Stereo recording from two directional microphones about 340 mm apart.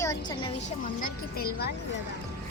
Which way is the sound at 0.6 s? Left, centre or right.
Left.